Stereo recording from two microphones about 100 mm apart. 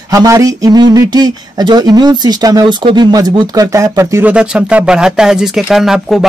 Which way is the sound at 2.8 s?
50° right (ahead or behind).